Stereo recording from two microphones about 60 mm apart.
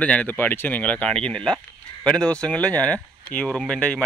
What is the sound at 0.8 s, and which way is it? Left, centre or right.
Speech, left.